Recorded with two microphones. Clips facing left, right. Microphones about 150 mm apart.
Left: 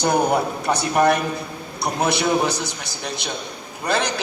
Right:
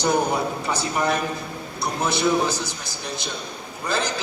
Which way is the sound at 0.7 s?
65° left (ahead or behind).